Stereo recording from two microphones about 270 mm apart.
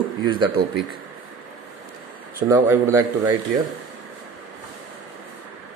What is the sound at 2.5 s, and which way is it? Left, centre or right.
Speech, centre.